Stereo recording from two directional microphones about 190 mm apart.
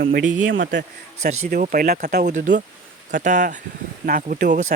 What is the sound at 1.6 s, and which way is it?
Speech, 50° right (ahead or behind).